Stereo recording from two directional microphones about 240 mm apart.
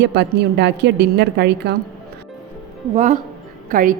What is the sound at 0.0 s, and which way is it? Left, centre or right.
A woman's voice, right.